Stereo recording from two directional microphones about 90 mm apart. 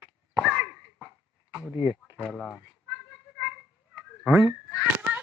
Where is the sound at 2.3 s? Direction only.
Centre (ahead or behind).